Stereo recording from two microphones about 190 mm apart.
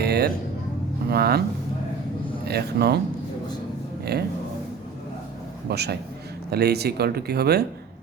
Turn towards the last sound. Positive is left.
turn(degrees=-55)  # may be behind; listen again after turning